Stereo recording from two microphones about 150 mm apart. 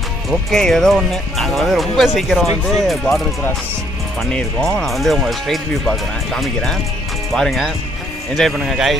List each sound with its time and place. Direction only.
0.3 s speech: centre (ahead or behind)
4.2 s speech: 5° left (ahead or behind)